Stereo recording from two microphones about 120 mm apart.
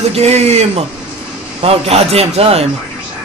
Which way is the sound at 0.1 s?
60° right (ahead or behind).